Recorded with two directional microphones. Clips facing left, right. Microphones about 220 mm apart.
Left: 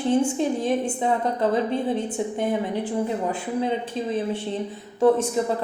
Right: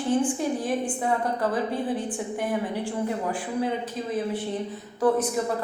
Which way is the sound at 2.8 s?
20° left (ahead or behind).